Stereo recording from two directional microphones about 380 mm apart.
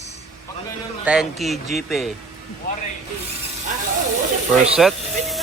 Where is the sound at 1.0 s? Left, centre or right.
Centre.